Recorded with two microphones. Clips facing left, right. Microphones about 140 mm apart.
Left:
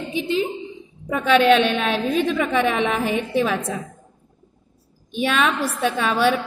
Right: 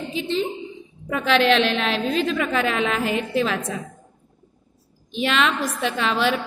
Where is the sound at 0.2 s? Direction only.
10° left (ahead or behind).